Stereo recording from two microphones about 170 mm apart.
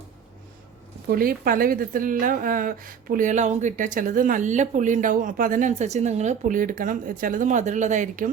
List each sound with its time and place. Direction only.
1.0 s a woman's voice: 60° right (ahead or behind)